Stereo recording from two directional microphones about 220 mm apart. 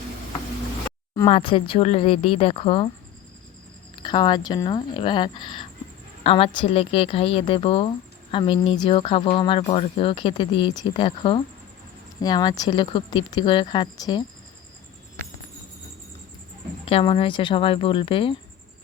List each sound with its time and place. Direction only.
1.3 s speech: 25° left (ahead or behind)
4.0 s speech: 20° left (ahead or behind)
16.8 s speech: 25° left (ahead or behind)